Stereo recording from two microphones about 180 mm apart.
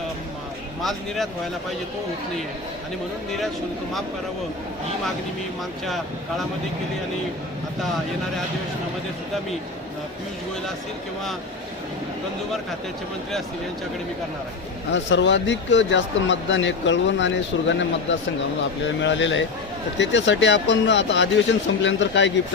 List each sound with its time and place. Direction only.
0.8 s speech: centre (ahead or behind)
5.8 s speech: centre (ahead or behind)
14.9 s speech: 85° left